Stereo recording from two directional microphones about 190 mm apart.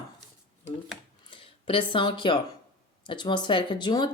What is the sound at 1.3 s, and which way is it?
Speech, 30° left (ahead or behind).